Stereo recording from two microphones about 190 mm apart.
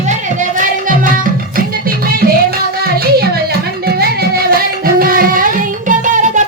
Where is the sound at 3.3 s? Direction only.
55° right (ahead or behind).